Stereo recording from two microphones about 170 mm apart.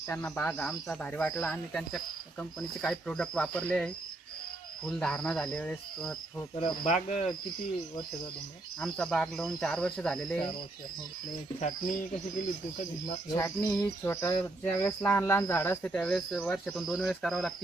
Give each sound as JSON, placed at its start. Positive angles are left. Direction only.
{"t": 0.1, "sound": "a sound", "side_deg": 5}
{"t": 0.9, "sound": "speech", "side_deg": 5}
{"t": 6.6, "sound": "speech", "side_deg": 40}
{"t": 8.8, "sound": "speech", "side_deg": 5}
{"t": 13.3, "sound": "a sound", "side_deg": 15}
{"t": 14.8, "sound": "speech", "side_deg": 10}